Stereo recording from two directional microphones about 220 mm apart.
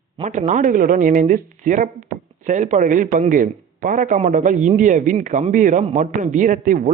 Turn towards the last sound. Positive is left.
turn(degrees=-35)  # may be behind; listen again after turning